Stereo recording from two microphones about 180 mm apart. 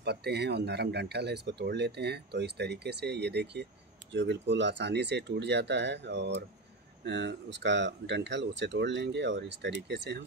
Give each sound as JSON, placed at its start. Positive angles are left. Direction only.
{"t": 0.0, "sound": "speech", "side_deg": -65}